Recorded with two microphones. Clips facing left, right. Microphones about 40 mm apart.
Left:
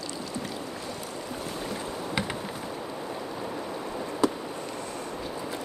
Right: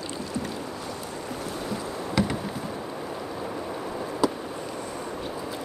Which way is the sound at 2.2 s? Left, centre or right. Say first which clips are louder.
Right 6 dB; left.